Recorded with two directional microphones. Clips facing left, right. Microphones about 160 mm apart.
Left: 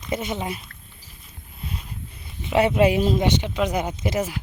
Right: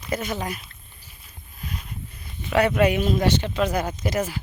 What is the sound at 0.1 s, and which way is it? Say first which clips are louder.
Speech: left 1 dB; 25° left (ahead or behind).